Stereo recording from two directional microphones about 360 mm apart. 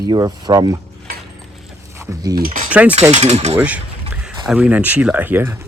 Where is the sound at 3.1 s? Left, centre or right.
Centre.